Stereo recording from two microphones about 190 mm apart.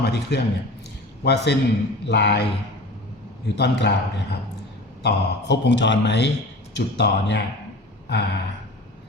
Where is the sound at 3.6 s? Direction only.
65° left (ahead or behind).